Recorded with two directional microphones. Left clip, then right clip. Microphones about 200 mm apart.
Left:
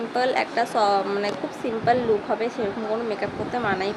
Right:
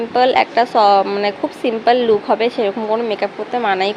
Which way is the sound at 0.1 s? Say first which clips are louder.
Right 10 dB; 20° right (ahead or behind).